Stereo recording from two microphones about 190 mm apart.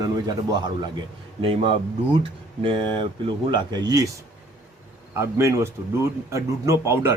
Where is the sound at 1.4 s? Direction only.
30° right (ahead or behind).